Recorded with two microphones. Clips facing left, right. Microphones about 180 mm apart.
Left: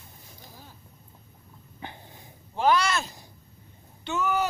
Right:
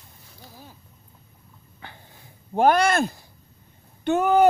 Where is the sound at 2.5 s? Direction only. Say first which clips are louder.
Right 5 dB; 55° right (ahead or behind).